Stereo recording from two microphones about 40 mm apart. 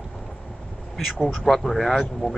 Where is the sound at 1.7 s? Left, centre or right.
Centre.